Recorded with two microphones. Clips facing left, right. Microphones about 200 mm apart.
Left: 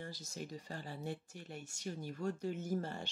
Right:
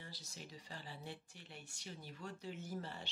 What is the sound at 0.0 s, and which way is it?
Speech, 45° left (ahead or behind).